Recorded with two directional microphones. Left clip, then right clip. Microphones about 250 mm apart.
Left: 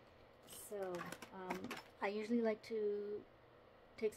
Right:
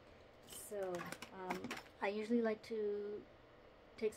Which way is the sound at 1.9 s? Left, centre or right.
Centre.